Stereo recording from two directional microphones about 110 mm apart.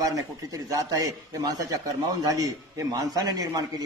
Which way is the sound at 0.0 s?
30° right (ahead or behind).